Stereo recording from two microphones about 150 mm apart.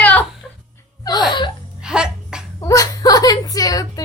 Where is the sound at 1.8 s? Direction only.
5° right (ahead or behind).